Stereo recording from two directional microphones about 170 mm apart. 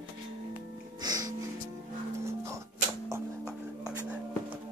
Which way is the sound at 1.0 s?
25° right (ahead or behind).